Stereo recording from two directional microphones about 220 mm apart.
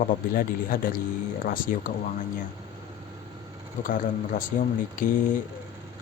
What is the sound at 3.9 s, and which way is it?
Speech, 35° left (ahead or behind).